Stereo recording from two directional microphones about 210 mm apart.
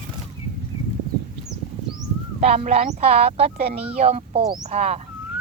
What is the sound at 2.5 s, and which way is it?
Speech, 35° right (ahead or behind).